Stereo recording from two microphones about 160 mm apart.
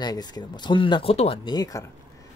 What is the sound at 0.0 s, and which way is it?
Speech, 25° left (ahead or behind).